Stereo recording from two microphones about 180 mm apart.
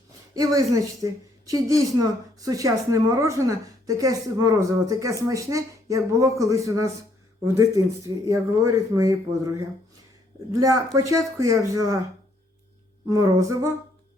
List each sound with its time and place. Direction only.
0.3 s speech: 20° right (ahead or behind)
13.1 s speech: 20° right (ahead or behind)